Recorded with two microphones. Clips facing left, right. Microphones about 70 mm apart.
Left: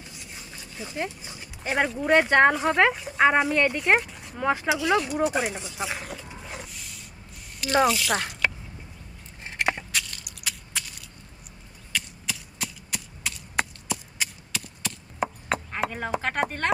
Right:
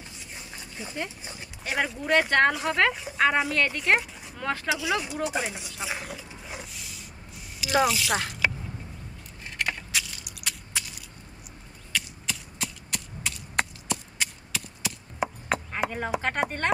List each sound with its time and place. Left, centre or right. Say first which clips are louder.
1.3 s speech: left 2 dB; centre
4.6 s speech: left 2 dB; centre
9.6 s crushing: left 4 dB; left
9.9 s biting: even; centre
11.9 s a sound: even; centre
15.4 s speech: even; centre